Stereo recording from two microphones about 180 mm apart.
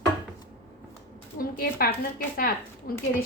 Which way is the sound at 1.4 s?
55° left (ahead or behind).